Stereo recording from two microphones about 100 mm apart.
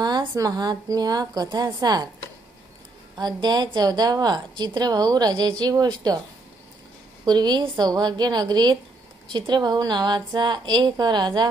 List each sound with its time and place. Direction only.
0.0 s a sound: 45° right (ahead or behind)
0.3 s a woman's voice: 40° right (ahead or behind)
3.2 s a woman's voice: 45° right (ahead or behind)
7.2 s a woman's voice: 45° right (ahead or behind)